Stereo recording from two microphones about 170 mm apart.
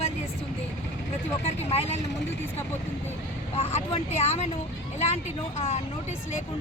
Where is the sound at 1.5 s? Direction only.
40° left (ahead or behind).